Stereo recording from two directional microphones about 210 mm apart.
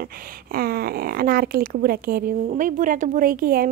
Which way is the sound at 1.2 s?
45° right (ahead or behind).